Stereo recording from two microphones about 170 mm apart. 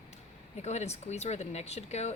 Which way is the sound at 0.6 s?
40° left (ahead or behind).